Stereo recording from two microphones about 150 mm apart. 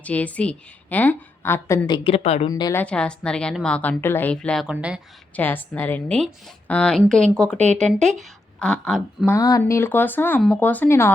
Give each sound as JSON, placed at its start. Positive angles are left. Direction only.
{"t": 0.0, "sound": "a woman's voice", "side_deg": 10}
{"t": 2.0, "sound": "a woman's voice", "side_deg": 45}
{"t": 2.5, "sound": "a woman's voice", "side_deg": 25}
{"t": 2.8, "sound": "a woman's voice", "side_deg": 5}
{"t": 4.6, "sound": "speech", "side_deg": -5}
{"t": 5.4, "sound": "a woman's voice", "side_deg": 10}
{"t": 9.3, "sound": "a woman's voice", "side_deg": 20}